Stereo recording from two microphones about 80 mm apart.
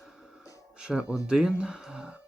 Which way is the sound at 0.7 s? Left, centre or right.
Centre.